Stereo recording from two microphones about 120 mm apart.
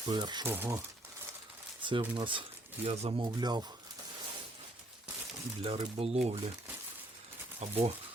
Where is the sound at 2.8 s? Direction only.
55° right (ahead or behind).